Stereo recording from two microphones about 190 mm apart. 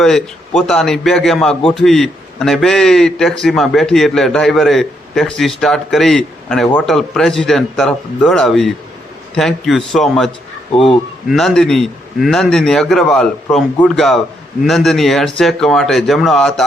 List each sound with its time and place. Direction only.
0.0 s a man's voice: centre (ahead or behind)
10.8 s speech: 25° left (ahead or behind)
11.3 s a man's voice: centre (ahead or behind)